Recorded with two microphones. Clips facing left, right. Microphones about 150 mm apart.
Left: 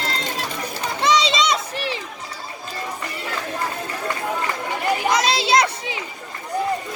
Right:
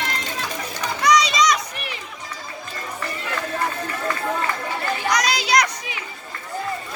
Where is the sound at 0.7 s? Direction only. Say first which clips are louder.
Right 1 dB; 25° left (ahead or behind).